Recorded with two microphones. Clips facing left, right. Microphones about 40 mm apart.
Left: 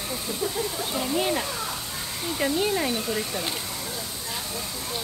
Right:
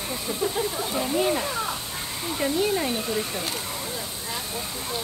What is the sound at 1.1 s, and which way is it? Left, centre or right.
Speech, centre.